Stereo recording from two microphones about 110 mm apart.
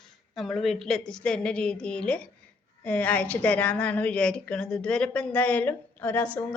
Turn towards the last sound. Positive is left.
turn(degrees=15)  # may be behind; listen again after turning